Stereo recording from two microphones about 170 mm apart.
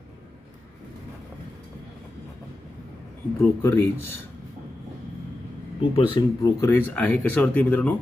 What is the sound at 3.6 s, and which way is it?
Speech, 10° left (ahead or behind).